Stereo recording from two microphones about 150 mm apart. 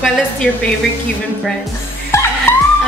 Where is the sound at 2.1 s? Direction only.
20° left (ahead or behind).